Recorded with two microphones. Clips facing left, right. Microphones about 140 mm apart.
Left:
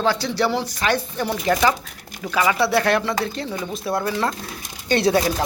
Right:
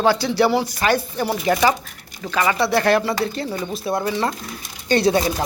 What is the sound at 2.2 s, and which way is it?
Speech, 5° left (ahead or behind).